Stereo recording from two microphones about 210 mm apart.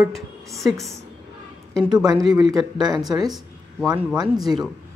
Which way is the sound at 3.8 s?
5° right (ahead or behind).